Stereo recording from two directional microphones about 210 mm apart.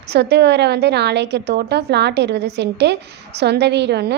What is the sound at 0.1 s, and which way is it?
A woman's voice, 55° right (ahead or behind).